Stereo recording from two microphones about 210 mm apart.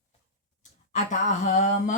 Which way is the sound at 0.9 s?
35° left (ahead or behind).